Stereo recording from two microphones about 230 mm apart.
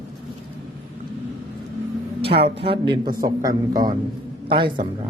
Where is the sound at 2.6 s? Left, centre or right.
Right.